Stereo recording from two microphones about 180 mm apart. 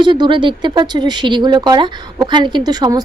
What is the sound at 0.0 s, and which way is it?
Speech, 25° right (ahead or behind).